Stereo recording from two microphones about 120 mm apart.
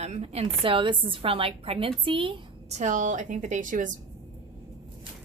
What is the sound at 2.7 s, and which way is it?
A woman's voice, 85° right.